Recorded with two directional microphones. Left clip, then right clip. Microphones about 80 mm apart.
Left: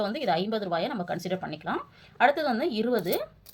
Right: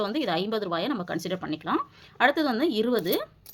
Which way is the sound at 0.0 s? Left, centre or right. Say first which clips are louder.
Even; right.